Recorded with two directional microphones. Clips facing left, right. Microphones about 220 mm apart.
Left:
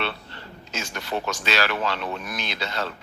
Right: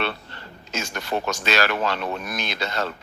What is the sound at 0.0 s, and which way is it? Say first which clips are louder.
Speech: right 2 dB; 45° right (ahead or behind).